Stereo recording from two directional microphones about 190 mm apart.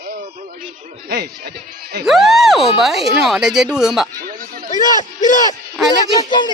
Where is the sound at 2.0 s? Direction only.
Centre (ahead or behind).